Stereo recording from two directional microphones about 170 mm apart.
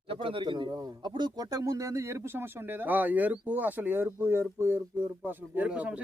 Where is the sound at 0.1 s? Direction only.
30° right (ahead or behind).